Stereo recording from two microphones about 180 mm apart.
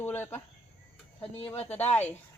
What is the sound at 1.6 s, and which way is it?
Speech, 10° left (ahead or behind).